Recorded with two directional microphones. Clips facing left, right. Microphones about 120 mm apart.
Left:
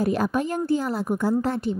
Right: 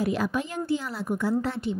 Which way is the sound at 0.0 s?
45° left (ahead or behind).